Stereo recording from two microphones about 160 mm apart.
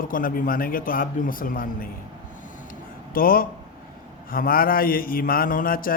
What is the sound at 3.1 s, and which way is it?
Mantra, 65° left (ahead or behind).